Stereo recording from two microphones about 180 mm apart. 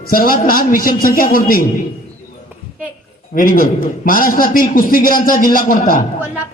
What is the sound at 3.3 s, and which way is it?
A man's voice, 50° left (ahead or behind).